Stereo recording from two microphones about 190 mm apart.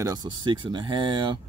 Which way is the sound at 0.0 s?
20° right (ahead or behind).